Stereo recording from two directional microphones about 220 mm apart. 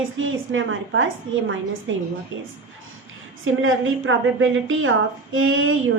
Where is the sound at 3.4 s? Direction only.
60° right (ahead or behind).